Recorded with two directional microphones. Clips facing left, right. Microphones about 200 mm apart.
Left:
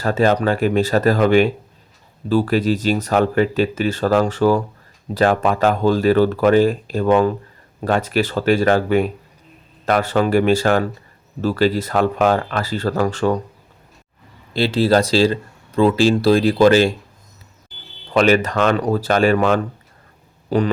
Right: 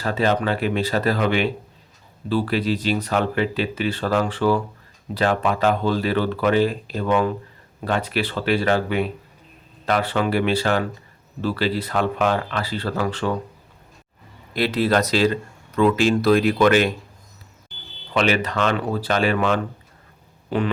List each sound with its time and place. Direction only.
0.0 s speech: 45° left (ahead or behind)
14.5 s speech: 30° left (ahead or behind)
18.1 s speech: 45° left (ahead or behind)